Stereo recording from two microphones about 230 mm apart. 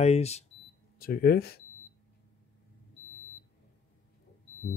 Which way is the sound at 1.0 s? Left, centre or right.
Left.